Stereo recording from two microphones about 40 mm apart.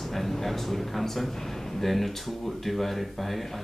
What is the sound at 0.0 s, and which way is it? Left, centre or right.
A man's voice, centre.